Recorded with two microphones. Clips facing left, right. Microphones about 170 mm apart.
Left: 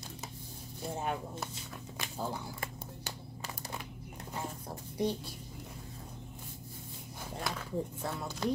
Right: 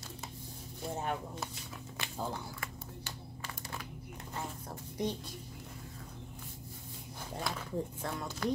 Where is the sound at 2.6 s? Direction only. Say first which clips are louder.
Left 2 dB; 40° left (ahead or behind).